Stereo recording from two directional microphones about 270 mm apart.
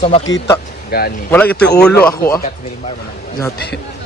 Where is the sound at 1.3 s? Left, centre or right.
Centre.